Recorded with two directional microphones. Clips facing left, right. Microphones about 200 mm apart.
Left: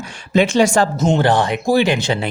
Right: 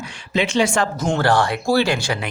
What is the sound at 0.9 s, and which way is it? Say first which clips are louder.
Speech: left 3 dB; 20° left (ahead or behind).